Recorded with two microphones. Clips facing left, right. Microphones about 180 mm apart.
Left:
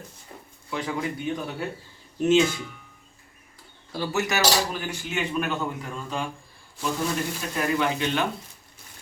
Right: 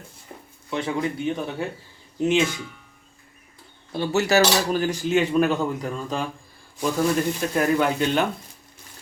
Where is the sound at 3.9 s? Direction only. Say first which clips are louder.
Right 6 dB; 25° right (ahead or behind).